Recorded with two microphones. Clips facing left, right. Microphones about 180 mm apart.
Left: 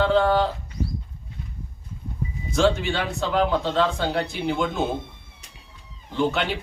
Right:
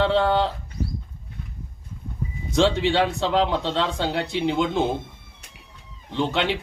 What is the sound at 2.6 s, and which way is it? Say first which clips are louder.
Speech: right 1 dB; 85° right.